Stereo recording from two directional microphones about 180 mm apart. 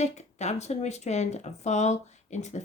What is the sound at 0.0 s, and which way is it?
Speech, 40° left (ahead or behind).